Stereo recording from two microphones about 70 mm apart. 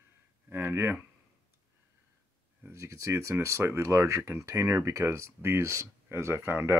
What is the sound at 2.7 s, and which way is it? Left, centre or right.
Speech, right.